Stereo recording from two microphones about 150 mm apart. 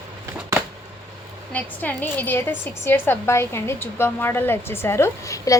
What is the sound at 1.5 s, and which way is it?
A woman's voice, 10° left (ahead or behind).